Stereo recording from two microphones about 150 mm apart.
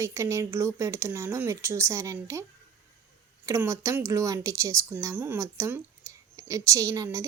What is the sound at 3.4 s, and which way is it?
A woman's voice, 20° right (ahead or behind).